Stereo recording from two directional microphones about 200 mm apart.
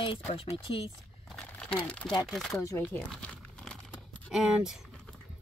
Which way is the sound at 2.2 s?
Centre (ahead or behind).